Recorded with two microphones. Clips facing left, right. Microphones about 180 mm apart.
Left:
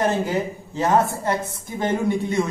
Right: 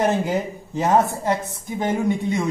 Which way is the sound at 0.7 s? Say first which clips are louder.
Right 1 dB; 15° right (ahead or behind).